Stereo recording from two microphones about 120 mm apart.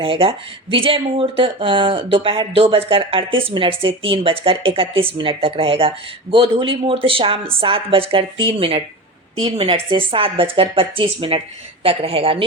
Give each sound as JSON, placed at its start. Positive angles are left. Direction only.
{"t": 0.0, "sound": "speech", "side_deg": -45}